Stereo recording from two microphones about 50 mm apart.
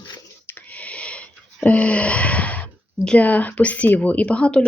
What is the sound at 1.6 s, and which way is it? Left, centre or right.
A woman's voice, left.